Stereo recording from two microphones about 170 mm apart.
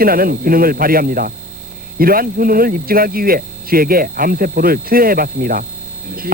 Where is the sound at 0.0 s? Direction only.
60° right (ahead or behind).